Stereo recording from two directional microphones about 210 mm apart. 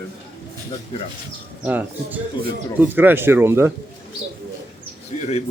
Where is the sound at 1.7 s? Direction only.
10° right (ahead or behind).